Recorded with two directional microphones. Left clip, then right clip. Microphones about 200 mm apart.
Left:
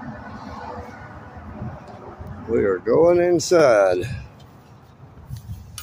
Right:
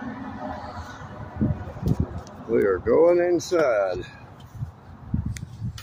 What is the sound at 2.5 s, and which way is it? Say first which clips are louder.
Speech: left 1 dB; 10° left (ahead or behind).